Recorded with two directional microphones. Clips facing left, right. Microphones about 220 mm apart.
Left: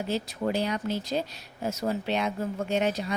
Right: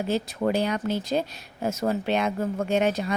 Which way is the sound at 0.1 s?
50° right (ahead or behind).